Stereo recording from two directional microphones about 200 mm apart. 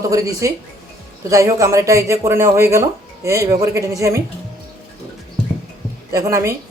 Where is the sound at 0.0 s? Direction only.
15° right (ahead or behind).